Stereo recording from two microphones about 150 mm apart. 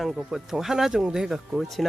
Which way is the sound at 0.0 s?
Centre (ahead or behind).